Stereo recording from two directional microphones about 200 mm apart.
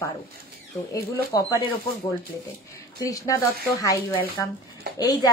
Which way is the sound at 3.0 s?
15° left (ahead or behind).